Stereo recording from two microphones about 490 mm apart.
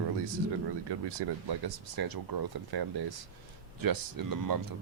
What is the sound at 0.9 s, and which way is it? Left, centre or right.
Speech, right.